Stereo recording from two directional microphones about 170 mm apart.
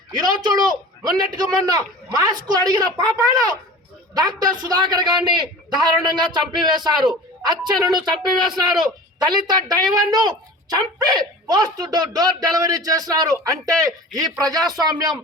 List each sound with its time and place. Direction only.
0.1 s a man's voice: 25° right (ahead or behind)